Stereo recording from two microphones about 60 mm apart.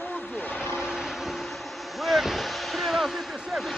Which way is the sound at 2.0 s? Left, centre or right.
Centre.